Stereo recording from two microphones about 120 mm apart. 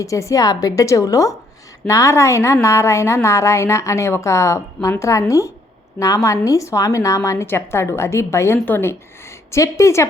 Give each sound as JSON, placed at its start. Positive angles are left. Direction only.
{"t": 0.0, "sound": "a woman's voice", "side_deg": 25}